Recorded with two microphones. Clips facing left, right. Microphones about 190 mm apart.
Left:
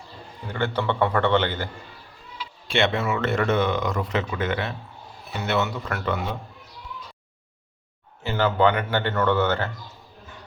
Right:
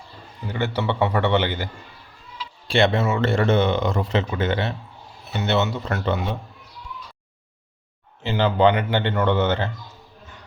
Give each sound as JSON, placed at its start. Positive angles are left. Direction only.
{"t": 0.5, "sound": "a man's voice", "side_deg": -10}
{"t": 2.6, "sound": "speech", "side_deg": -35}
{"t": 8.2, "sound": "speech", "side_deg": -20}